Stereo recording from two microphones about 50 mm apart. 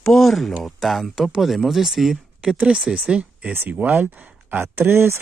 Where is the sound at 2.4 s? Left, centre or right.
Centre.